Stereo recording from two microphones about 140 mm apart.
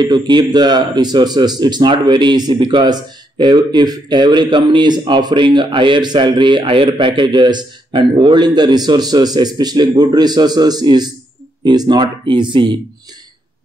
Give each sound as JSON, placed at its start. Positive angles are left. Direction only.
{"t": 0.0, "sound": "speech", "side_deg": -30}